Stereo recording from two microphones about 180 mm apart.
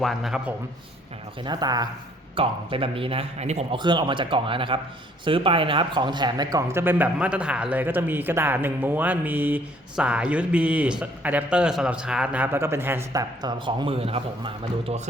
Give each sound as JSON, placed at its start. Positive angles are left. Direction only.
{"t": 0.0, "sound": "a man's voice", "side_deg": 0}
{"t": 1.5, "sound": "a man's voice", "side_deg": -25}
{"t": 3.8, "sound": "speech", "side_deg": -25}